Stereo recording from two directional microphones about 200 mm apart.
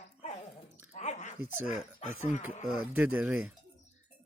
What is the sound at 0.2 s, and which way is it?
Dog, 35° left (ahead or behind).